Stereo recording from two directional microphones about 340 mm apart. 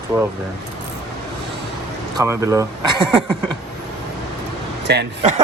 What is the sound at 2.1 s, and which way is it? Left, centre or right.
Speech, centre.